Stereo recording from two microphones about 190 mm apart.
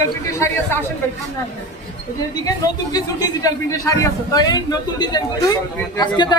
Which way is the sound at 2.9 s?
20° left (ahead or behind).